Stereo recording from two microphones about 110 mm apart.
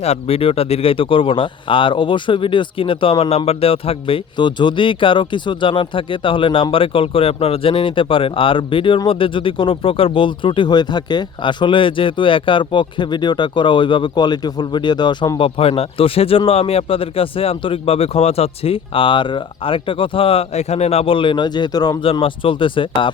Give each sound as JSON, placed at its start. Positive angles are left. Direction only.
{"t": 0.0, "sound": "speech", "side_deg": 70}
{"t": 15.4, "sound": "speech", "side_deg": 55}
{"t": 22.0, "sound": "speech", "side_deg": 55}